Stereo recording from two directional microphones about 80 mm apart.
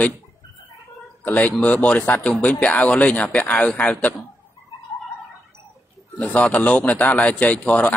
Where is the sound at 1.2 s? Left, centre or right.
Centre.